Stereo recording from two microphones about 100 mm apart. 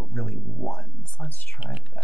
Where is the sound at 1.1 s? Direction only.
15° left (ahead or behind).